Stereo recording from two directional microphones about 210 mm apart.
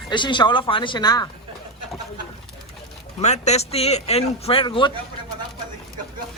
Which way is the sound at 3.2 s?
30° left (ahead or behind).